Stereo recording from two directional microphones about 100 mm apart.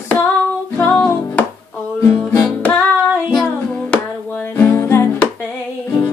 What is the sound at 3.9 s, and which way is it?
Music, 15° left (ahead or behind).